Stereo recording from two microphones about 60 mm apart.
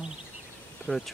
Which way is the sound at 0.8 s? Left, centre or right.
Centre.